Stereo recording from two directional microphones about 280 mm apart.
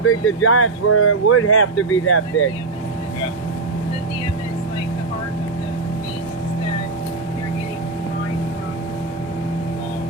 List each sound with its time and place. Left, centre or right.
0.0 s speech: left